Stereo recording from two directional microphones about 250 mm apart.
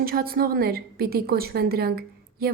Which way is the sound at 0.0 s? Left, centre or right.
Right.